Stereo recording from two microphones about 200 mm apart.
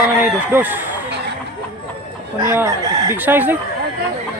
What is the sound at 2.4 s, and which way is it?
Speech, 10° right (ahead or behind).